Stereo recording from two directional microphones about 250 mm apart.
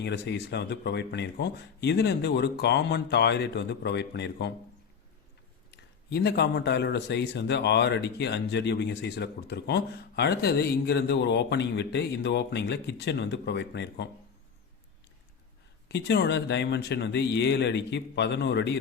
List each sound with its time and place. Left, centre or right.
0.0 s a man's voice: left
5.7 s a man's voice: left
15.9 s a man's voice: left